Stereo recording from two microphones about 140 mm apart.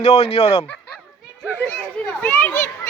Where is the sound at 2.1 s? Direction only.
5° left (ahead or behind).